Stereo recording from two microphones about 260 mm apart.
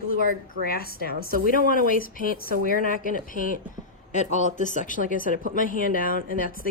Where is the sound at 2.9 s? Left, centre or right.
Left.